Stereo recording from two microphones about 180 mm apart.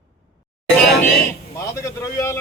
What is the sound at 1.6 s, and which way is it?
Speech, 15° left (ahead or behind).